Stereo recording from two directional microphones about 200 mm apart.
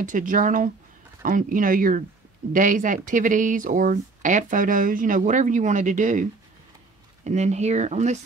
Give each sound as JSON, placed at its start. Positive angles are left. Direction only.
{"t": 0.0, "sound": "speech", "side_deg": -40}
{"t": 7.2, "sound": "speech", "side_deg": -35}